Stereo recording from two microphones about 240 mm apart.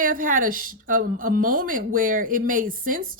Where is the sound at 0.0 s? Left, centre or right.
Right.